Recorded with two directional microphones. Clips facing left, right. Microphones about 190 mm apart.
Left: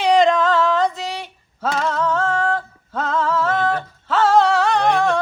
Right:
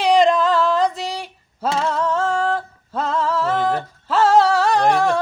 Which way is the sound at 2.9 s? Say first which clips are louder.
Right 1 dB; 30° right (ahead or behind).